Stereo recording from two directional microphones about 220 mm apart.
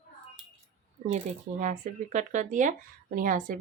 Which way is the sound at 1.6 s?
35° right (ahead or behind).